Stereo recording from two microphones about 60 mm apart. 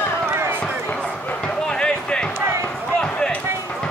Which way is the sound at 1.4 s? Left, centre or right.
Centre.